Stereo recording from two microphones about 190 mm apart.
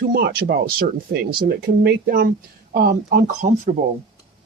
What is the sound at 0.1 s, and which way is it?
Speech, 55° right (ahead or behind).